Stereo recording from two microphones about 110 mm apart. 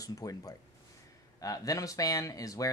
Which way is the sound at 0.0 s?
30° left (ahead or behind).